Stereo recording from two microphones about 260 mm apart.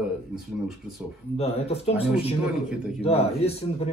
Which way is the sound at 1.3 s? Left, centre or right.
Left.